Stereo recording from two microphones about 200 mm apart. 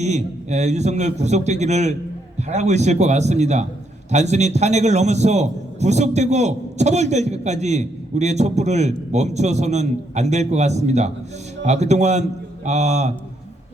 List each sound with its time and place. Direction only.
0.0 s a man's voice: 35° right (ahead or behind)